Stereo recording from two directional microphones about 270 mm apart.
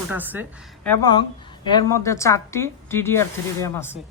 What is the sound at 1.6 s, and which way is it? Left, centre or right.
Speech, centre.